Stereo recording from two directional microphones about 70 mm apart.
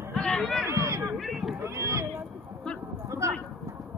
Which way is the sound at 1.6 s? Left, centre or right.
Right.